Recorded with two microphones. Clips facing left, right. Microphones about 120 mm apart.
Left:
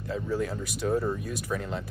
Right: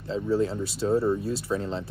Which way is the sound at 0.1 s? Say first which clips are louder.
Right 5 dB; 25° right (ahead or behind).